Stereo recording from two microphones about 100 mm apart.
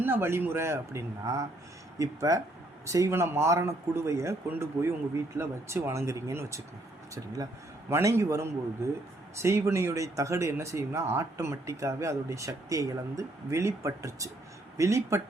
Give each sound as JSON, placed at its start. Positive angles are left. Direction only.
{"t": 0.0, "sound": "a man's voice", "side_deg": -20}
{"t": 7.9, "sound": "a man's voice", "side_deg": -25}